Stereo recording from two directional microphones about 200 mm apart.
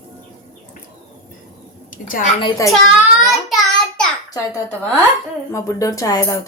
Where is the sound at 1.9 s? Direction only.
40° left (ahead or behind).